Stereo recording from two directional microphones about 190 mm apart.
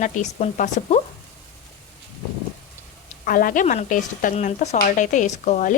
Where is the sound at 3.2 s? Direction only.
45° left (ahead or behind).